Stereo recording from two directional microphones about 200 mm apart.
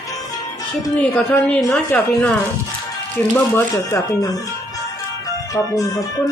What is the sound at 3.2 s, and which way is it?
Music, 10° left (ahead or behind).